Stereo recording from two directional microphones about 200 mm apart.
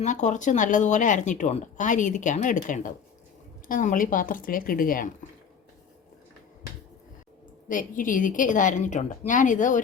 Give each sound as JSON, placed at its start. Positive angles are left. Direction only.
{"t": 0.0, "sound": "speech", "side_deg": 35}
{"t": 7.7, "sound": "speech", "side_deg": 40}